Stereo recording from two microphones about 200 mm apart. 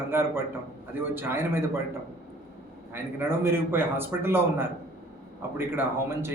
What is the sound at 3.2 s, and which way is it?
Speech, 10° right (ahead or behind).